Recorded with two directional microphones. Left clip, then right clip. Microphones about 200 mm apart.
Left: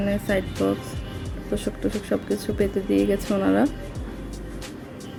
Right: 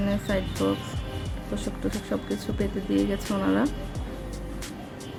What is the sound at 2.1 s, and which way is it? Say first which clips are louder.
Speech: left 5 dB; 15° left (ahead or behind).